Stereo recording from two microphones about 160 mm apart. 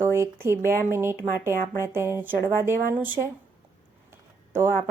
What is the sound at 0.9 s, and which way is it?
Speech, 15° right (ahead or behind).